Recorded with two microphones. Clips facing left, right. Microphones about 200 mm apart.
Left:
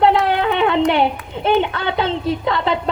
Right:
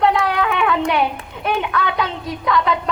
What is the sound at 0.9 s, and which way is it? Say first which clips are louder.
Speech: left 3 dB; 25° left (ahead or behind).